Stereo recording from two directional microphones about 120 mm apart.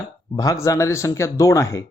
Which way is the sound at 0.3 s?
25° left (ahead or behind).